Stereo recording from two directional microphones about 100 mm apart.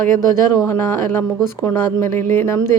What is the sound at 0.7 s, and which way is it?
Speech, 25° left (ahead or behind).